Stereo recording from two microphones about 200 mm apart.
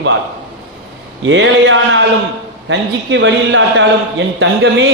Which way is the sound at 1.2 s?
70° right (ahead or behind).